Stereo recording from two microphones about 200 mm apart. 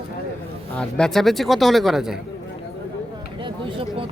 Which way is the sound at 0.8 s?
5° left (ahead or behind).